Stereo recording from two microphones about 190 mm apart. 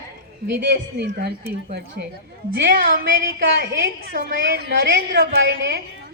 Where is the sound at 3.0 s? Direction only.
55° right (ahead or behind).